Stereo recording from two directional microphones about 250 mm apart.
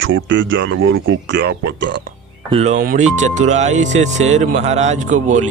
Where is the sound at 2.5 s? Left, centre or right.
Right.